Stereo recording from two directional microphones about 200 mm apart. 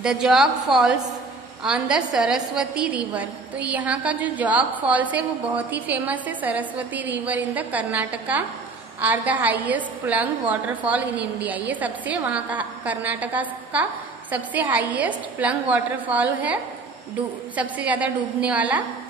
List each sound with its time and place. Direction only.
0.0 s a woman's voice: 5° right (ahead or behind)
17.6 s a woman's voice: 5° right (ahead or behind)